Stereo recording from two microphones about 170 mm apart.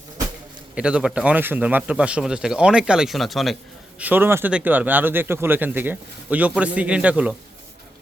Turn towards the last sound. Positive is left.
turn(degrees=-5)  # may be behind; listen again after turning